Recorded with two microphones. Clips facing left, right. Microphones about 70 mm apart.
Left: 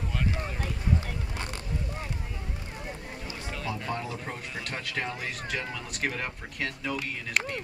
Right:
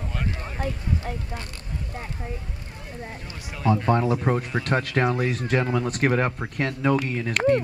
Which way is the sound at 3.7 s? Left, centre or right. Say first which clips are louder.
Right 13 dB; right.